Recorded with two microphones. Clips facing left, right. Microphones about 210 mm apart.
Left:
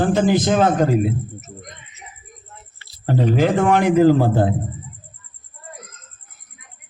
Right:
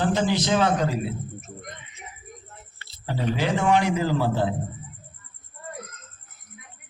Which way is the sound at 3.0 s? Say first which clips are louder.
Left 8 dB; 50° left (ahead or behind).